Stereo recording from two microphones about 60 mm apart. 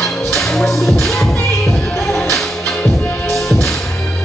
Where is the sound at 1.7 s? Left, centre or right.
Left.